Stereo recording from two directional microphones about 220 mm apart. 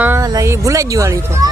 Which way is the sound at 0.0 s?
10° right (ahead or behind).